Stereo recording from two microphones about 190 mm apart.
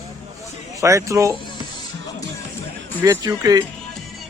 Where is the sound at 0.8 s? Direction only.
15° right (ahead or behind).